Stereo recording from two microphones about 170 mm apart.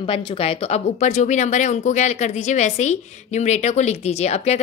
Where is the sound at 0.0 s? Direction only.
30° left (ahead or behind).